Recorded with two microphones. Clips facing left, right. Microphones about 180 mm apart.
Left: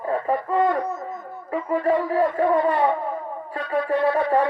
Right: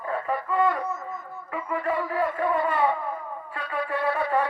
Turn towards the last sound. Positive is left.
turn(degrees=40)  # may be behind; listen again after turning